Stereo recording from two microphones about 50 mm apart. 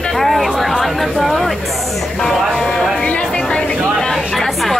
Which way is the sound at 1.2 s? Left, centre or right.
Centre.